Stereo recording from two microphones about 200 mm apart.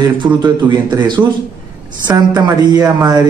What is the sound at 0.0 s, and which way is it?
A man's voice, 20° right (ahead or behind).